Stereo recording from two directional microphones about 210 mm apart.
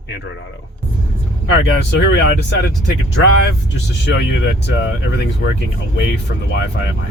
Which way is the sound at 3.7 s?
55° left (ahead or behind).